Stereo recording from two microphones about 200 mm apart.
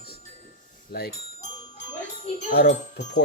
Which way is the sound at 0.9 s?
50° left (ahead or behind).